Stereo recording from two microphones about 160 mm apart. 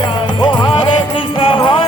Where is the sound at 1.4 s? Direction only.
35° left (ahead or behind).